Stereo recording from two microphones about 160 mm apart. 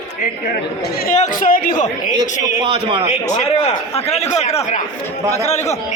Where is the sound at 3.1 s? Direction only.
45° left (ahead or behind).